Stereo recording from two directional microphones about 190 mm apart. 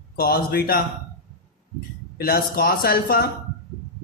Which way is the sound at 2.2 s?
50° left (ahead or behind).